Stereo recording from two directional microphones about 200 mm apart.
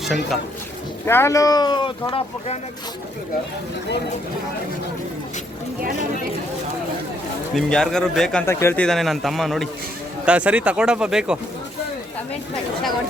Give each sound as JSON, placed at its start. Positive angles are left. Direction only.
{"t": 0.0, "sound": "speech", "side_deg": 0}
{"t": 1.0, "sound": "speech", "side_deg": 10}
{"t": 7.5, "sound": "a man's voice", "side_deg": 0}